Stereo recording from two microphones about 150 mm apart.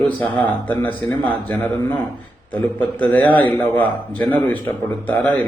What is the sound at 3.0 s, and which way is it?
Speech, 10° left (ahead or behind).